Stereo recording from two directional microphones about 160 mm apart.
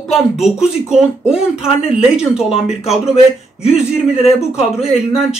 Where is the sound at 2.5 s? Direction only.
40° left (ahead or behind).